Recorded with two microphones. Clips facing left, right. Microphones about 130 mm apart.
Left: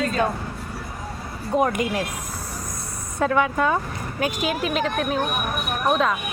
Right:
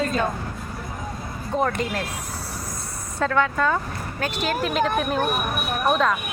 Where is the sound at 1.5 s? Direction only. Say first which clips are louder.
Left 3 dB; 10° left (ahead or behind).